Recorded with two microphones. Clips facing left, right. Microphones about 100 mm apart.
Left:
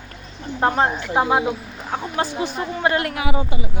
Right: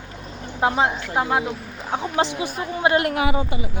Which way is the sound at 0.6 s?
5° right (ahead or behind).